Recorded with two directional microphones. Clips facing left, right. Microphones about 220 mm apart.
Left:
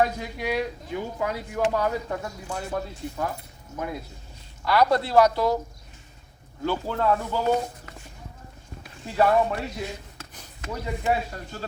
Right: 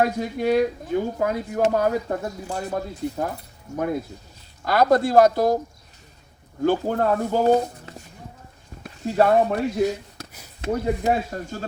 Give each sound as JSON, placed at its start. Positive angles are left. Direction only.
{"t": 0.0, "sound": "speech", "side_deg": -50}
{"t": 3.8, "sound": "speech", "side_deg": -50}
{"t": 6.7, "sound": "speech", "side_deg": -45}